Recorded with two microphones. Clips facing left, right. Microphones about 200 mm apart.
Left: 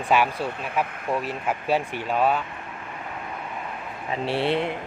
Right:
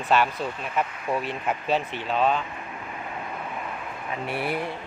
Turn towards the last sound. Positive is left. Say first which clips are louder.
# left 5 dB
turn(degrees=25)  # may be behind; listen again after turning